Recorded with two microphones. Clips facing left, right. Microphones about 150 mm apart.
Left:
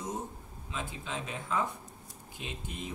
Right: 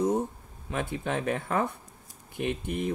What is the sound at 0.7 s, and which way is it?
Speech, 60° right (ahead or behind).